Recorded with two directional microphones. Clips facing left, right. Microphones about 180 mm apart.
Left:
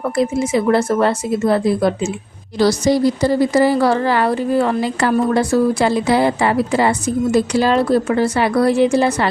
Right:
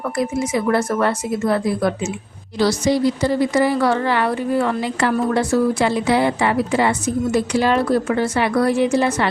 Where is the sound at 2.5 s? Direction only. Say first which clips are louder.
Left 3 dB; 40° left (ahead or behind).